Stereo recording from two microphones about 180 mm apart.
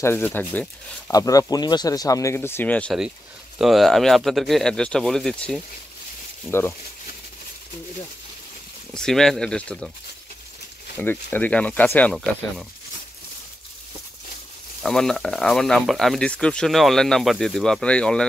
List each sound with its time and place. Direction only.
0.0 s speech: 10° left (ahead or behind)
1.1 s speech: 20° left (ahead or behind)
8.9 s speech: 5° left (ahead or behind)
11.0 s speech: 10° left (ahead or behind)
14.8 s speech: 5° left (ahead or behind)